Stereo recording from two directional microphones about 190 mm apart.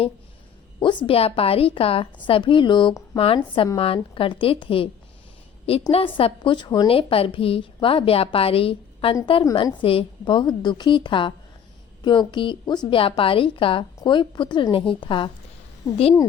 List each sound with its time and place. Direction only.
0.8 s a woman's voice: 25° left (ahead or behind)
5.9 s a woman's voice: 30° left (ahead or behind)